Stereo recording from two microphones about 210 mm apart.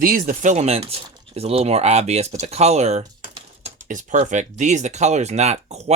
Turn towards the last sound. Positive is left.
turn(degrees=-30)  # may be behind; listen again after turning